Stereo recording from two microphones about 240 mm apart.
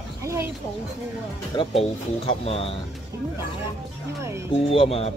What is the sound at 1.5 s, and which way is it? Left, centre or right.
Speech, left.